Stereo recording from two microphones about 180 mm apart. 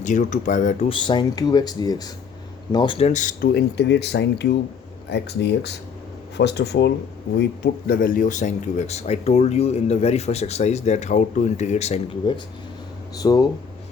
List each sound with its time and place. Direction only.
0.0 s speech: 45° left (ahead or behind)
0.9 s speech: 25° left (ahead or behind)
3.1 s speech: 45° left (ahead or behind)
3.5 s speech: 70° left (ahead or behind); by 12.3 s 35° left (ahead or behind)
13.2 s speech: 20° left (ahead or behind)